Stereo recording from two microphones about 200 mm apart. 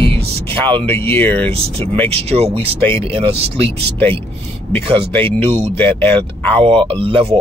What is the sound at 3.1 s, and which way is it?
Speech, 30° right (ahead or behind).